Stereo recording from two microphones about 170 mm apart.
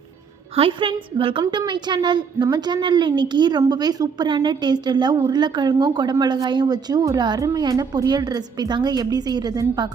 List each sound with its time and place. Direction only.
0.5 s a woman's voice: 35° right (ahead or behind)